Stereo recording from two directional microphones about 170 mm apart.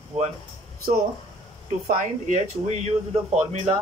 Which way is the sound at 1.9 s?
50° right (ahead or behind).